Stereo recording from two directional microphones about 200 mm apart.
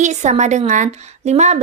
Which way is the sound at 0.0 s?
35° right (ahead or behind).